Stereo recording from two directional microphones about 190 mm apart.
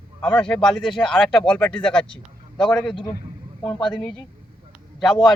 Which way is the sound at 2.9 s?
25° left (ahead or behind).